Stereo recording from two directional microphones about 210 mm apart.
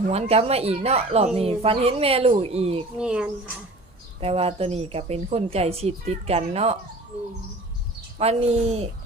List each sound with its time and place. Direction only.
0.1 s speech: 30° right (ahead or behind)
3.0 s speech: 5° right (ahead or behind)
4.2 s speech: 30° right (ahead or behind)
8.2 s speech: 30° right (ahead or behind)